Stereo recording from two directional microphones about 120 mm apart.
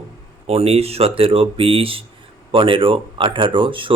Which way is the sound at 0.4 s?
55° right (ahead or behind).